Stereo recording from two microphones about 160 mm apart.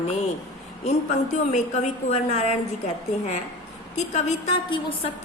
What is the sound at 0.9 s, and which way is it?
A woman's voice, 45° left (ahead or behind).